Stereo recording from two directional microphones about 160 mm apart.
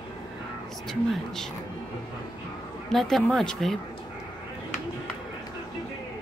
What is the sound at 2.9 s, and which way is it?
Speech, centre (ahead or behind).